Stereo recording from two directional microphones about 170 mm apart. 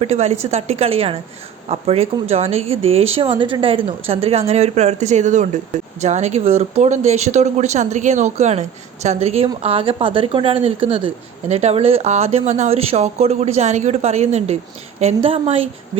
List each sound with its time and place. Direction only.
0.0 s a woman's voice: 40° right (ahead or behind)